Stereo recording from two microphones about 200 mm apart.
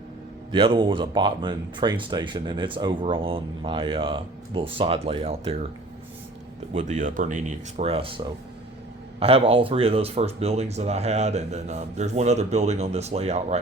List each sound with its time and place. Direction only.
0.5 s speech: 25° right (ahead or behind)
6.7 s speech: 35° right (ahead or behind)
9.2 s speech: 30° right (ahead or behind)